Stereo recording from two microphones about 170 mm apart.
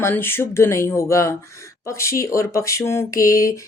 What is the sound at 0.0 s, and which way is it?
A woman's voice, 15° left (ahead or behind).